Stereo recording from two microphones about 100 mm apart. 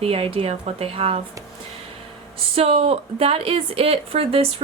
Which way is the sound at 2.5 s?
75° right (ahead or behind).